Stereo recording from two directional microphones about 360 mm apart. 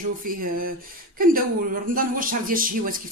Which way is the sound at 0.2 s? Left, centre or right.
Right.